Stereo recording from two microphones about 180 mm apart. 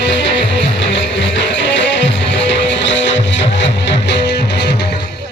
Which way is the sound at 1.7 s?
85° left.